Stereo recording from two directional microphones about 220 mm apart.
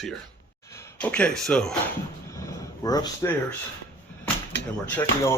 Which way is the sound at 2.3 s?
15° left (ahead or behind).